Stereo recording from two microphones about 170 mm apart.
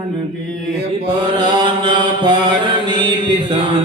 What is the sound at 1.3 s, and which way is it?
Chant, 25° right (ahead or behind).